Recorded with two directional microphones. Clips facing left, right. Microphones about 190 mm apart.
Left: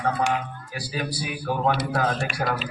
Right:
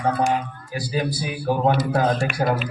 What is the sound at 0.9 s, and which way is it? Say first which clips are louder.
A man's voice: right 4 dB; 25° right (ahead or behind).